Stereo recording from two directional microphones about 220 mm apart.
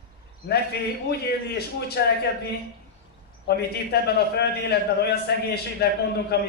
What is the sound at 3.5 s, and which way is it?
A man's voice, 45° left (ahead or behind).